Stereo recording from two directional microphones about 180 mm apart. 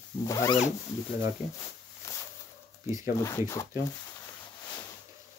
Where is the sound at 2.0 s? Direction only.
15° left (ahead or behind).